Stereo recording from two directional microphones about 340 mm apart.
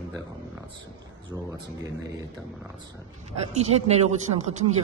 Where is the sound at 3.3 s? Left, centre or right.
Centre.